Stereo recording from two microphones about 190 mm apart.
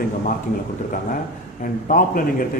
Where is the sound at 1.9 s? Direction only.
45° left (ahead or behind).